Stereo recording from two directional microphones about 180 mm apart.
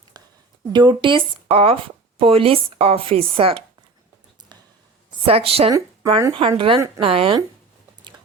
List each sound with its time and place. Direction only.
0.1 s a sound: 20° right (ahead or behind)
0.7 s speech: 25° right (ahead or behind)
5.2 s speech: 30° right (ahead or behind)
5.7 s speech: 15° right (ahead or behind)
6.6 s a woman's voice: 30° right (ahead or behind)